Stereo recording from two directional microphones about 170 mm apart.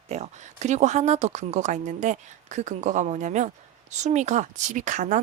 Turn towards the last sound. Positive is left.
turn(degrees=-45)  # may be behind; listen again after turning